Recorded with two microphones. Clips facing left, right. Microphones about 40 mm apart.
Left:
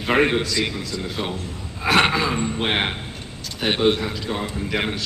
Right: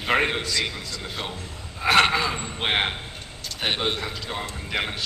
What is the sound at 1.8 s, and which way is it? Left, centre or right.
Speech, centre.